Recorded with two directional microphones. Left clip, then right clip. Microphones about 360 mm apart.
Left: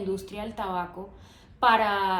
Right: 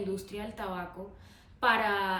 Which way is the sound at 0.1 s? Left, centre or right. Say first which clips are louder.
Left 5 dB; centre.